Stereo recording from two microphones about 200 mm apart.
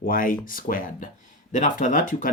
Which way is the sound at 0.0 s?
45° left (ahead or behind).